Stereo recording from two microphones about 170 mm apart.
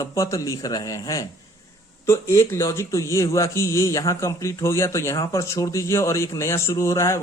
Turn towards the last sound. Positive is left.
turn(degrees=15)  # may be behind; listen again after turning